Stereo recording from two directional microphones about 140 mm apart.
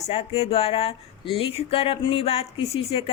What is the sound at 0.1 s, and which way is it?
Speech, 45° left (ahead or behind).